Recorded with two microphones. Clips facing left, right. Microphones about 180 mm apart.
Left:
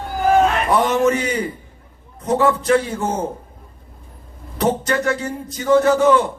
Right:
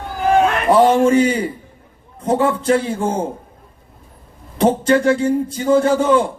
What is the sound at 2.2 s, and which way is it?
Speech, 30° right (ahead or behind).